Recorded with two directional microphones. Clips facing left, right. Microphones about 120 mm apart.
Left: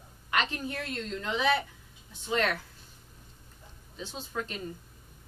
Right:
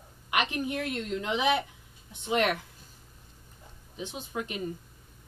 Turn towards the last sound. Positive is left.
turn(degrees=-15)  # may be behind; listen again after turning